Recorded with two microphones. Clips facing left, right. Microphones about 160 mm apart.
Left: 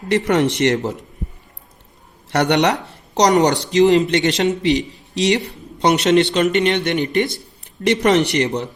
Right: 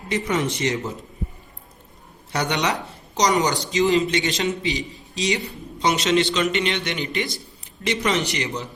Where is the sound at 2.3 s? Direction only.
70° left (ahead or behind); by 8.7 s 55° left (ahead or behind).